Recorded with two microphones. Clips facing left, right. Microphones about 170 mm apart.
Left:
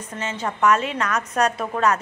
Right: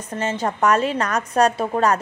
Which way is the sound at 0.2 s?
40° right (ahead or behind).